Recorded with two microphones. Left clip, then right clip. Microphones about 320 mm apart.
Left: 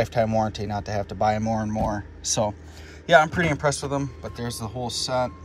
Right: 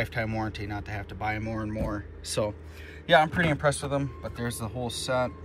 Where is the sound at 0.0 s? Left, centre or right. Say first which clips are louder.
Left 9 dB; centre.